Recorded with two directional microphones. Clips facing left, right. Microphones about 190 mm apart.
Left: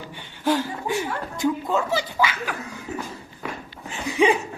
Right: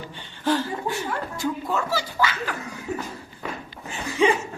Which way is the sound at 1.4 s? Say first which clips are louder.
Left 5 dB; 20° left (ahead or behind).